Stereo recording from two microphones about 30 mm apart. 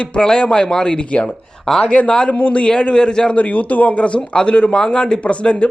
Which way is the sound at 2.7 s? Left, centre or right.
Left.